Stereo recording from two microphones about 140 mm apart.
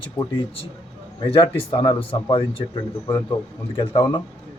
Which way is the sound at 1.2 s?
40° left (ahead or behind).